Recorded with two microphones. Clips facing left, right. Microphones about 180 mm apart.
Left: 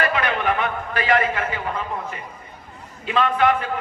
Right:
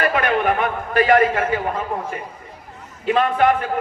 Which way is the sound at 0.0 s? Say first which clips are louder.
Right 3 dB; 50° right (ahead or behind).